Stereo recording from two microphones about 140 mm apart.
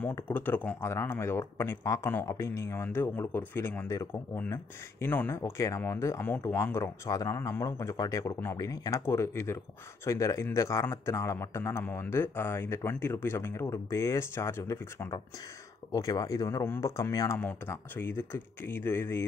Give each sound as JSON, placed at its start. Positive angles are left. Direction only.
{"t": 0.0, "sound": "a man's voice", "side_deg": 15}